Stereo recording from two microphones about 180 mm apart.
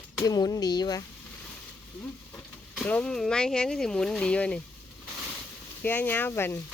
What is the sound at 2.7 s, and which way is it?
Speech, 5° left (ahead or behind).